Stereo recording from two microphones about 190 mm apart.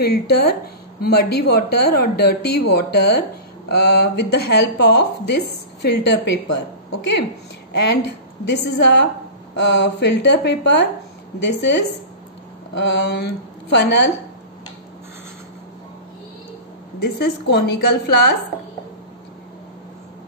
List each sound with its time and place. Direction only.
0.0 s a woman's voice: 55° left (ahead or behind)
17.0 s speech: 60° left (ahead or behind)